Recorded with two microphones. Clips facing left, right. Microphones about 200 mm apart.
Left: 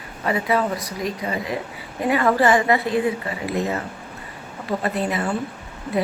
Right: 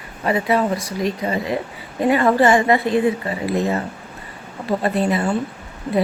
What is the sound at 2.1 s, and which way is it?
Speech, 25° right (ahead or behind).